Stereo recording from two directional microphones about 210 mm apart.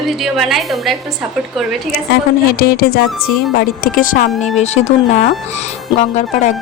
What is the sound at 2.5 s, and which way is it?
A woman's voice, 45° left (ahead or behind).